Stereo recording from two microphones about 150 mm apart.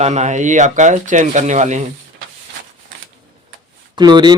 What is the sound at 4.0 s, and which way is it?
Speech, 30° right (ahead or behind).